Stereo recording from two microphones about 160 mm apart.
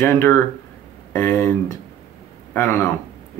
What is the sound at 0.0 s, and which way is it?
A man's voice, 15° left (ahead or behind).